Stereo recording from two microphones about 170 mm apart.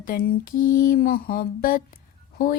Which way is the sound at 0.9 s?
60° left (ahead or behind).